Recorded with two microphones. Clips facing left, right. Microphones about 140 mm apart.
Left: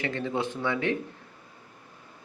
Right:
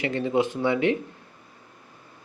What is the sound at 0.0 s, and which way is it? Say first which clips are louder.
Speech: right 6 dB; 15° right (ahead or behind).